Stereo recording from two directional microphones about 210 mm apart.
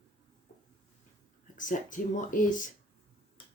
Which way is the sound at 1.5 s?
35° left (ahead or behind).